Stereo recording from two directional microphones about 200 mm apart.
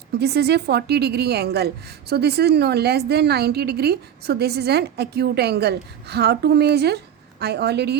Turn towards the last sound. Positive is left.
turn(degrees=-55)  # may be behind; listen again after turning